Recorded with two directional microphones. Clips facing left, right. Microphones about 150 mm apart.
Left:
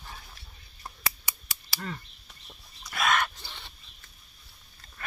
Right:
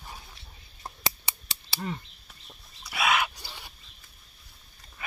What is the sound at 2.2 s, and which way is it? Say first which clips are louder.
Chicken: even; 5° right (ahead or behind).